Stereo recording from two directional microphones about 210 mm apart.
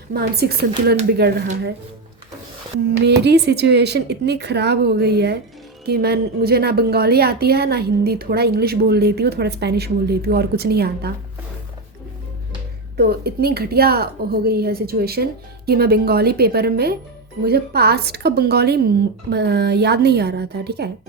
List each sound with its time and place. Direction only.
0.1 s a woman's voice: 50° right (ahead or behind)
3.0 s a woman's voice: 50° right (ahead or behind)
13.0 s a woman's voice: 50° right (ahead or behind)